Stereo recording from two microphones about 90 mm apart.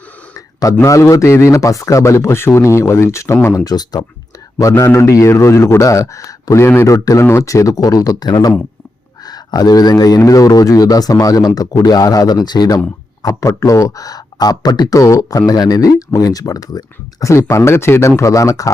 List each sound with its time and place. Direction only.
0.3 s speech: 40° left (ahead or behind)
3.5 s speech: 45° left (ahead or behind)
4.6 s speech: 30° left (ahead or behind)